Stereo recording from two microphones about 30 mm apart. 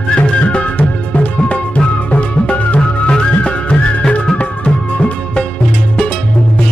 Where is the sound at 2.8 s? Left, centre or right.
Left.